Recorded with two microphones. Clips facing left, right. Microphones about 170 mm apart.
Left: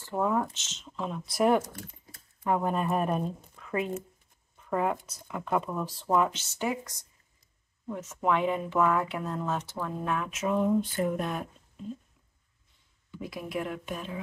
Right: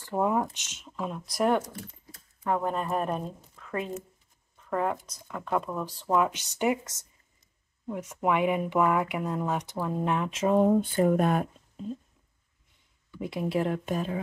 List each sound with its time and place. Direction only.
0.0 s speech: 15° right (ahead or behind)
1.3 s speech: 5° left (ahead or behind)
4.6 s speech: 5° left (ahead or behind)
6.3 s speech: 15° right (ahead or behind)
7.8 s speech: 10° right (ahead or behind)
10.4 s speech: 35° right (ahead or behind)
10.7 s a sound: 55° right (ahead or behind)
13.2 s speech: 25° right (ahead or behind); by 14.2 s 40° right (ahead or behind)